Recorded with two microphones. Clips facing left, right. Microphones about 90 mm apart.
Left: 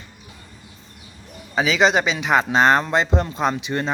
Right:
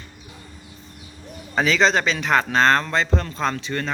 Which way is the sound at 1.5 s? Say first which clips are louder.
Left 1 dB; 5° left (ahead or behind).